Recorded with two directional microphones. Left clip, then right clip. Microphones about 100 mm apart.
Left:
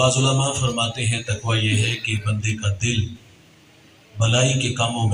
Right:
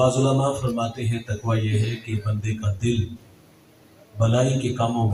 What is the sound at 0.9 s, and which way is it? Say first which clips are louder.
Speech: left 6 dB; 25° right (ahead or behind).